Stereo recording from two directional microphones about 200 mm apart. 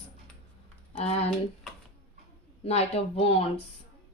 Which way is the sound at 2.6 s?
30° left (ahead or behind).